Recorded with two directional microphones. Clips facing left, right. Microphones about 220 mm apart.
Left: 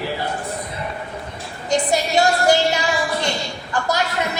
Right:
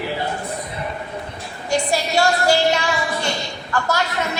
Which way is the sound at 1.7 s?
20° left (ahead or behind).